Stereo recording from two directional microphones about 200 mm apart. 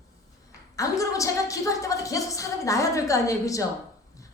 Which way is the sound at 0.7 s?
15° left (ahead or behind).